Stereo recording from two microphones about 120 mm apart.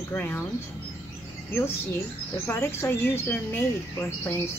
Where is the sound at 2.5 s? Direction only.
20° left (ahead or behind).